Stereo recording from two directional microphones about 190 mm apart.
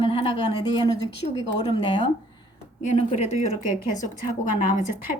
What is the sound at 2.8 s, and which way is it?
A woman's voice, 40° left (ahead or behind).